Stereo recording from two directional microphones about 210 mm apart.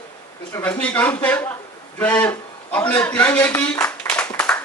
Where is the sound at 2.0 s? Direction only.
5° left (ahead or behind).